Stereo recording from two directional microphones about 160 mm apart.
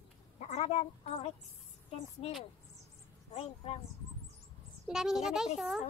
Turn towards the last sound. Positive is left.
turn(degrees=0)  # may be behind; listen again after turning